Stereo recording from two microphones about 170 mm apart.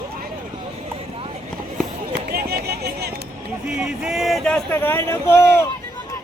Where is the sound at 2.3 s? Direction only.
65° right (ahead or behind).